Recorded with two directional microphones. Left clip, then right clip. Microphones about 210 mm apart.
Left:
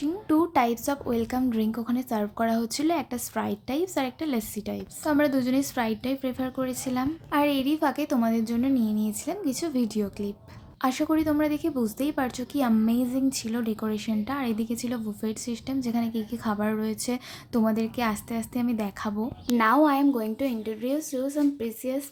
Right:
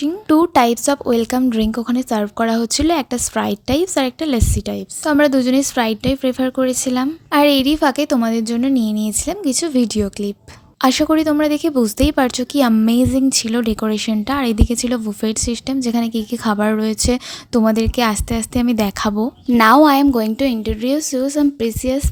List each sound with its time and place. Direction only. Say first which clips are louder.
0.0 s speech: right 10 dB; 40° right (ahead or behind)